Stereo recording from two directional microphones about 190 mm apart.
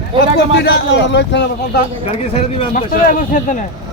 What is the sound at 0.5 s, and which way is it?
A man's voice, 65° left (ahead or behind).